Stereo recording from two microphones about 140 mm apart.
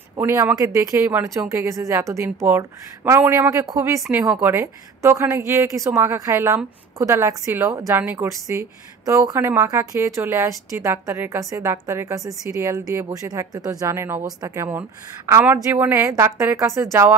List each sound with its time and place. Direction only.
0.1 s a woman's voice: 20° right (ahead or behind)
4.1 s a woman's voice: 10° right (ahead or behind)